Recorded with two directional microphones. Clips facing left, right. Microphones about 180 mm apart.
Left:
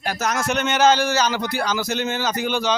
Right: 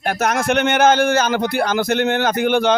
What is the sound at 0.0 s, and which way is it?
A man's voice, 55° right (ahead or behind).